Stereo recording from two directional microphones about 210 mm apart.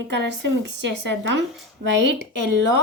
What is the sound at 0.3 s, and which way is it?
Speech, 55° right (ahead or behind).